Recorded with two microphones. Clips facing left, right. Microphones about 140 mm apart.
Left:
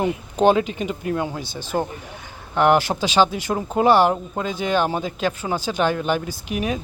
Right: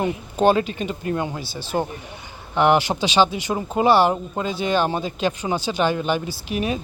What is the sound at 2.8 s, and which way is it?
Speech, 10° right (ahead or behind).